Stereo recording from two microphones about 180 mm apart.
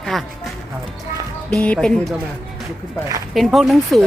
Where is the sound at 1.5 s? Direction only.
5° left (ahead or behind).